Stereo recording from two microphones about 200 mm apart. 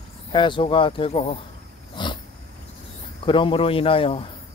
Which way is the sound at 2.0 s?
20° left (ahead or behind).